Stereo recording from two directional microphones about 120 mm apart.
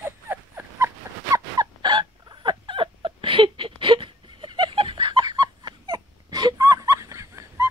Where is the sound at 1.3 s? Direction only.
35° right (ahead or behind).